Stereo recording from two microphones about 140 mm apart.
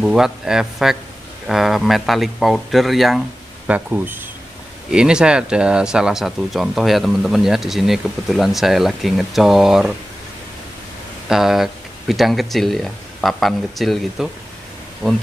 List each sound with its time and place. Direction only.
0.0 s speech: 5° right (ahead or behind)
3.6 s speech: 10° right (ahead or behind)
11.2 s speech: 5° right (ahead or behind)